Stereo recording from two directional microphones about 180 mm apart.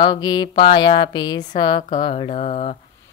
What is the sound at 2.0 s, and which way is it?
Speech, 30° left (ahead or behind).